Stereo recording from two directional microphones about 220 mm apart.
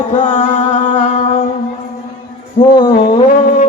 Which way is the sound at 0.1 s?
35° left (ahead or behind).